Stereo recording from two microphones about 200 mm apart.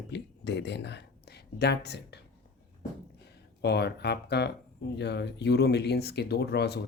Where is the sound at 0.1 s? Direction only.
60° left (ahead or behind).